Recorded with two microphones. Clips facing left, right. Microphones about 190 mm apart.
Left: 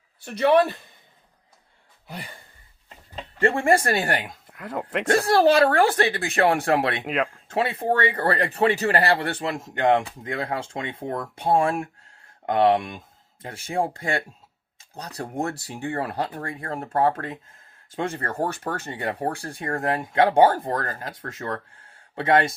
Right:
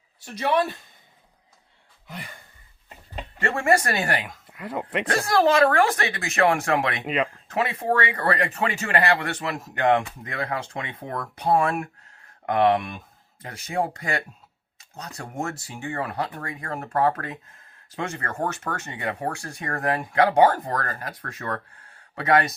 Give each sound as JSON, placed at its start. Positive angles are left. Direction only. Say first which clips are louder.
{"t": 0.3, "sound": "speech", "louder": "left 6 dB", "side_deg": 60}
{"t": 2.0, "sound": "a sound", "louder": "left 1 dB", "side_deg": 35}
{"t": 3.4, "sound": "speech", "louder": "left 2 dB", "side_deg": 30}
{"t": 4.4, "sound": "speech", "louder": "even", "side_deg": 0}
{"t": 5.2, "sound": "speech", "louder": "left 1 dB", "side_deg": 35}
{"t": 7.0, "sound": "speech", "louder": "even", "side_deg": 0}
{"t": 7.4, "sound": "speech", "louder": "left 1 dB", "side_deg": 30}